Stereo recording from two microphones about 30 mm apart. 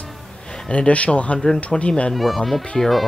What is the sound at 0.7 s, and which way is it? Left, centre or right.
Speech, left.